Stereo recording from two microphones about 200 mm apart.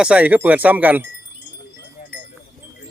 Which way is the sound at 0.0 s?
5° right (ahead or behind).